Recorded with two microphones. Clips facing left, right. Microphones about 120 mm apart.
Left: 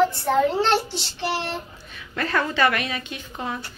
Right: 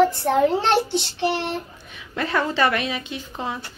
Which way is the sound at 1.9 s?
15° right (ahead or behind).